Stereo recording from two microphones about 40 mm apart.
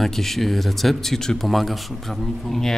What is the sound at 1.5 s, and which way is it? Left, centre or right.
A man's voice, centre.